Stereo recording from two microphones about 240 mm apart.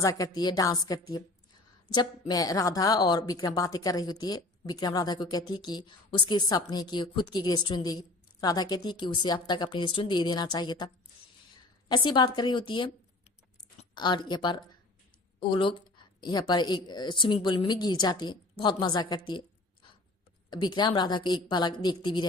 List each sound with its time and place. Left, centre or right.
0.0 s a woman's voice: centre
11.9 s a woman's voice: centre
13.9 s a woman's voice: centre
20.5 s a woman's voice: centre